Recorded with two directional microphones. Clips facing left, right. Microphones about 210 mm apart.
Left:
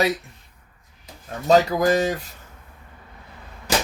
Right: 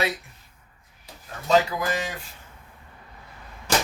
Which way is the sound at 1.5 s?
40° left (ahead or behind).